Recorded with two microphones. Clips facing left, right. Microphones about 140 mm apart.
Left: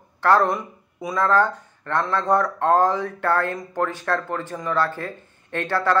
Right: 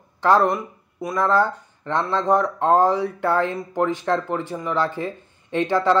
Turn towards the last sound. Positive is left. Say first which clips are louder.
# right 3 dB
turn(degrees=-15)  # may be behind; listen again after turning